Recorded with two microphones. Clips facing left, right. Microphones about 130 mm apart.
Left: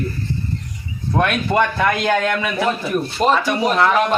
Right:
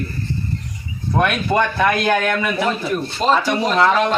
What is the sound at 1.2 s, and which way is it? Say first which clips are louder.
Speech: even; 15° right (ahead or behind).